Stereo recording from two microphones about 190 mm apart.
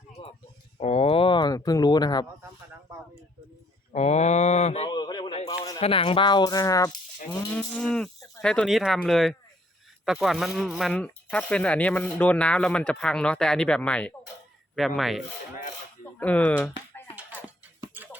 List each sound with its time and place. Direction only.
0.2 s a sound: 30° left (ahead or behind)
0.8 s speech: 35° left (ahead or behind)
3.9 s mantra: 35° left (ahead or behind)
4.9 s a sound: 20° left (ahead or behind)
5.8 s speech: 30° left (ahead or behind)
7.3 s moo: 20° left (ahead or behind)
7.5 s speech: 5° left (ahead or behind)
16.2 s speech: 5° left (ahead or behind)
17.9 s a sound: 10° right (ahead or behind)